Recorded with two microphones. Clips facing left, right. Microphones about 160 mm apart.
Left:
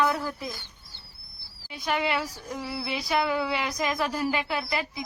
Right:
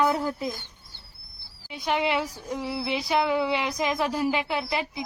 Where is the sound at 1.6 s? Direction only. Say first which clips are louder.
Right 2 dB; 20° right (ahead or behind).